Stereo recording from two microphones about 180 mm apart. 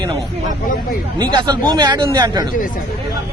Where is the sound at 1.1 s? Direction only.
25° right (ahead or behind).